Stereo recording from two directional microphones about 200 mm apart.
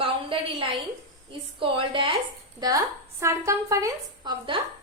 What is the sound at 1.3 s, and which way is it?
A woman's voice, 25° right (ahead or behind).